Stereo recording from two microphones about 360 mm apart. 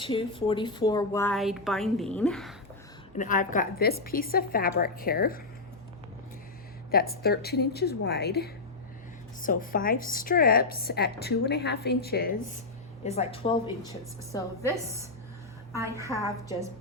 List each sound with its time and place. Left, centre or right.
0.0 s a woman's voice: centre
3.2 s a woman's voice: left
6.9 s a woman's voice: left; by 14.5 s centre
15.7 s a woman's voice: centre